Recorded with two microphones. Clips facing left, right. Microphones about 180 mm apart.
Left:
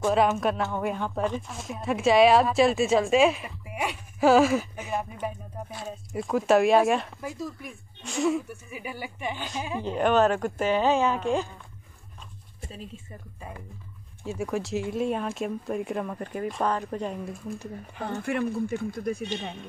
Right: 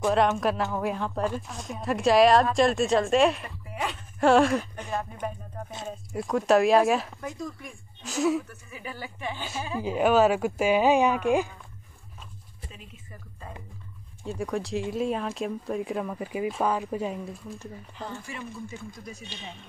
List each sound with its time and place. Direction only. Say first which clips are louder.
0.1 s speech: even; centre (ahead or behind)
3.6 s a sound: left 1 dB; 15° left (ahead or behind)
4.2 s speech: left 1 dB; centre (ahead or behind)
8.5 s speech: left 3 dB; 15° left (ahead or behind)
9.8 s speech: right 1 dB; 5° right (ahead or behind)
12.5 s a sound: left 6 dB; 45° left (ahead or behind)
14.2 s speech: left 1 dB; centre (ahead or behind)
17.9 s speech: left 10 dB; 60° left (ahead or behind)